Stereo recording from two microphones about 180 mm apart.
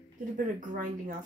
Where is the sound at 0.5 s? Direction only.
45° right (ahead or behind).